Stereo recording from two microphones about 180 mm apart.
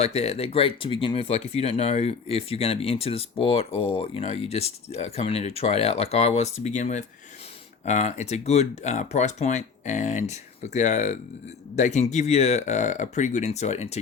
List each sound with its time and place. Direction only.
0.0 s speech: 35° left (ahead or behind)